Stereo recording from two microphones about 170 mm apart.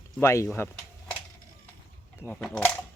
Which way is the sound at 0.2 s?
15° left (ahead or behind).